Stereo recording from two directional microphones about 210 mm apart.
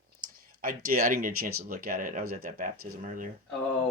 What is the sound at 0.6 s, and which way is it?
Speech, 45° right (ahead or behind).